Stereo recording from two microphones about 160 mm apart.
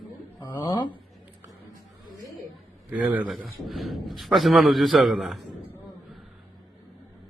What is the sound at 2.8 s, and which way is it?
A man's voice, 10° right (ahead or behind).